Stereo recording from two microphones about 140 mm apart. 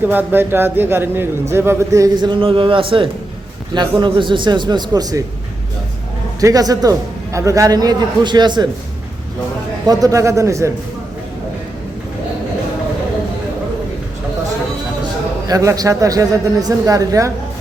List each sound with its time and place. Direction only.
0.0 s a man's voice: 15° right (ahead or behind); by 5.2 s 30° right (ahead or behind)
6.4 s a man's voice: 25° right (ahead or behind)
9.8 s a man's voice: 25° right (ahead or behind)
15.4 s a man's voice: 25° right (ahead or behind)